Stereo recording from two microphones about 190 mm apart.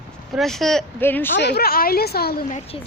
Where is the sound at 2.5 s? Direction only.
35° left (ahead or behind).